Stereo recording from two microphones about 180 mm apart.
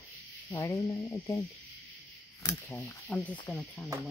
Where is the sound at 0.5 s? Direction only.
20° left (ahead or behind).